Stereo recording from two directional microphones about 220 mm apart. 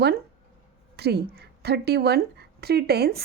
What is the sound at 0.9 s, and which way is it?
A woman's voice, 45° right (ahead or behind).